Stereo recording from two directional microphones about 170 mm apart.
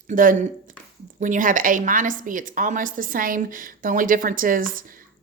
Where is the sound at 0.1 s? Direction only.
50° right (ahead or behind).